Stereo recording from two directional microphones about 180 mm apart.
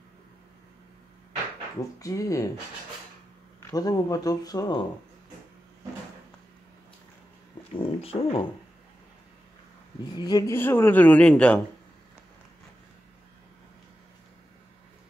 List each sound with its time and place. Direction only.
2.0 s speech: 20° left (ahead or behind)
3.7 s speech: 20° left (ahead or behind)
7.7 s speech: 30° left (ahead or behind)
10.1 s speech: 20° left (ahead or behind); by 11.6 s 5° left (ahead or behind)